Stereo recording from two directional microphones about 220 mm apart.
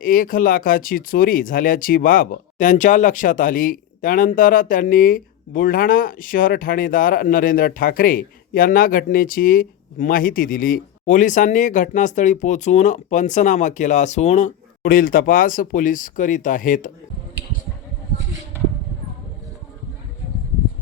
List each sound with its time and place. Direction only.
0.0 s speech: 40° left (ahead or behind)